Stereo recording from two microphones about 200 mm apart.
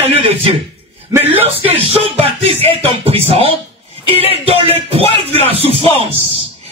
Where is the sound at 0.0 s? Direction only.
30° right (ahead or behind).